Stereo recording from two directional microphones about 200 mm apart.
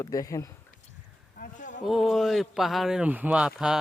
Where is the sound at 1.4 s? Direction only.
40° left (ahead or behind).